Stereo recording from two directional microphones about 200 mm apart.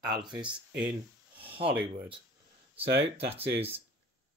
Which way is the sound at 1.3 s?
25° right (ahead or behind).